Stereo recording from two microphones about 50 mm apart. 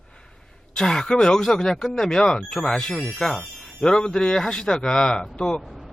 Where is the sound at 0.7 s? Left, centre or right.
Centre.